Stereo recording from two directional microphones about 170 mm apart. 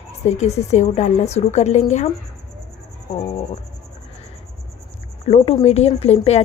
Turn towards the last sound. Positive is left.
turn(degrees=40)  # may be behind; listen again after turning